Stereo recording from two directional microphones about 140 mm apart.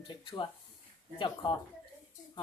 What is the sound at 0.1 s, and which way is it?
Speech, 35° left (ahead or behind).